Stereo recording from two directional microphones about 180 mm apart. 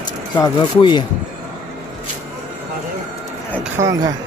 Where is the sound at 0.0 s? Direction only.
25° left (ahead or behind).